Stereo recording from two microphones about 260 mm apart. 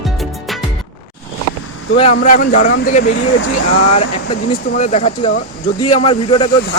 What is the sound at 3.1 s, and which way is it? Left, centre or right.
Speech, left.